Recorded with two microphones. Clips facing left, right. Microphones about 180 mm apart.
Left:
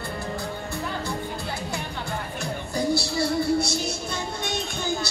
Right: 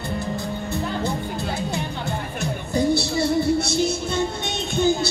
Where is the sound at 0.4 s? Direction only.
20° right (ahead or behind).